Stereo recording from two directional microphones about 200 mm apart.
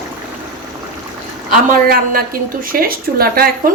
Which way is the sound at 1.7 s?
45° right (ahead or behind).